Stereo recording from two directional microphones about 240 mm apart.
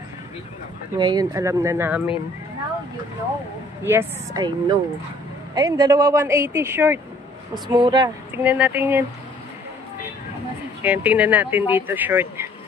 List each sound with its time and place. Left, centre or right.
0.9 s speech: centre
3.8 s speech: centre
8.5 s speech: centre
10.8 s speech: centre